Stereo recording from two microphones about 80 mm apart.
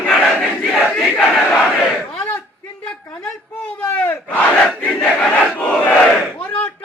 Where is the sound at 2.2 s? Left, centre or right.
Centre.